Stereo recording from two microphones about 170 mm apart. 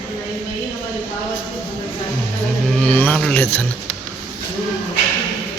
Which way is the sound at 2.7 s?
10° left (ahead or behind).